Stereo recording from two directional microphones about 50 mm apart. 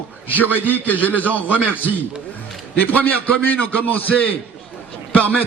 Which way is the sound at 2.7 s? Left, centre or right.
Left.